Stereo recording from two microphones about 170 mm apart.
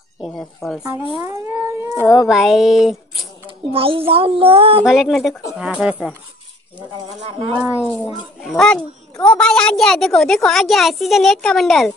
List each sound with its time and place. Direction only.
0.2 s a woman's voice: centre (ahead or behind)
1.2 s cat: 15° right (ahead or behind)
2.0 s a woman's voice: centre (ahead or behind)
3.4 s speech: 35° right (ahead or behind)
4.8 s a woman's voice: centre (ahead or behind)
7.8 s a woman's voice: 10° left (ahead or behind)